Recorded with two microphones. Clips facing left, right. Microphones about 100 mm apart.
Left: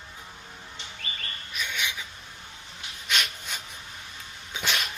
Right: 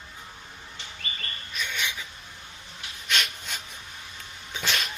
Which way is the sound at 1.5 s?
5° left (ahead or behind).